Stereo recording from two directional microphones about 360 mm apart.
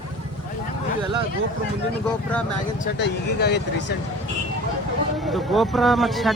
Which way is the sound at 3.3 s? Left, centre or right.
Left.